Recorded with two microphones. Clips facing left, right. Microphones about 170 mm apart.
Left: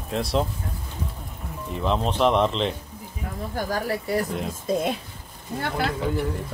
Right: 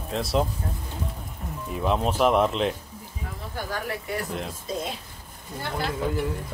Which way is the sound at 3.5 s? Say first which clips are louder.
Left 5 dB; 40° left (ahead or behind).